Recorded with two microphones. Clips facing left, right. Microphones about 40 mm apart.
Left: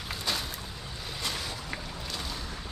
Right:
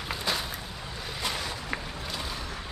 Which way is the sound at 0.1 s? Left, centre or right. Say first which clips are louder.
Right 2 dB; centre.